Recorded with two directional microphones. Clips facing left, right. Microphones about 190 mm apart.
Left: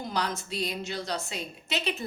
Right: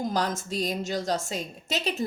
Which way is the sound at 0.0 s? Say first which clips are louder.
Right 4 dB; 45° right (ahead or behind).